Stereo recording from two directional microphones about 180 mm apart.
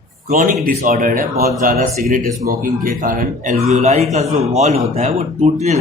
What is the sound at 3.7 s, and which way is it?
Speech, 35° right (ahead or behind).